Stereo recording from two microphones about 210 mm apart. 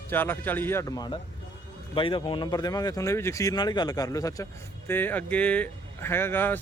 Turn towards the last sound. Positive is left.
turn(degrees=10)  # may be behind; listen again after turning